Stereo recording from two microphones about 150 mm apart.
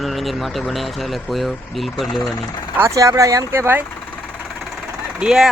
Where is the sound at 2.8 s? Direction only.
20° right (ahead or behind).